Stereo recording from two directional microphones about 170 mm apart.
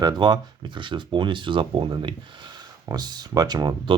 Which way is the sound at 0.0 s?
25° right (ahead or behind).